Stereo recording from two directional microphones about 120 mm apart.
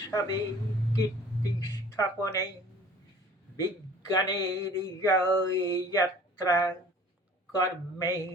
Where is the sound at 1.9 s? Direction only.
25° left (ahead or behind).